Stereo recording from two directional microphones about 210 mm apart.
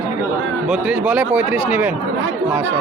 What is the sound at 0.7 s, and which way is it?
Speech, 5° right (ahead or behind).